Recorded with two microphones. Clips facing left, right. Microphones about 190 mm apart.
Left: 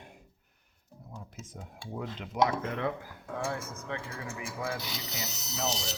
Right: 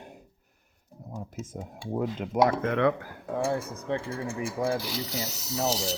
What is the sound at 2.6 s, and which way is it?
Speech, 75° right (ahead or behind).